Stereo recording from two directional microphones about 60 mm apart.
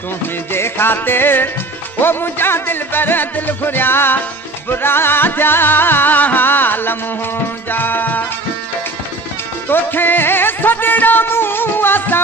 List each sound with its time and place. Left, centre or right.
0.5 s music: left
9.7 s music: left